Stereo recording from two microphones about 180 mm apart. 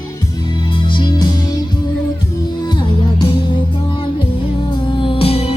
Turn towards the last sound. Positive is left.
turn(degrees=35)  # may be behind; listen again after turning